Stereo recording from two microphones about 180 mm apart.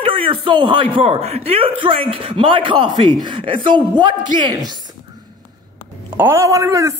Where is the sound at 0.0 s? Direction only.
30° right (ahead or behind).